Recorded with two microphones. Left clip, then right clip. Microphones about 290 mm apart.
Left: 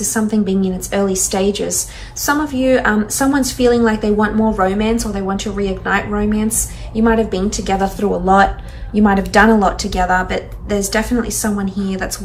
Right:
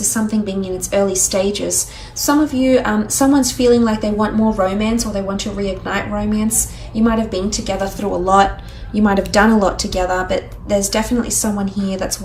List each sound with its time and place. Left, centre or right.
0.0 s a woman's voice: centre
9.0 s speech: centre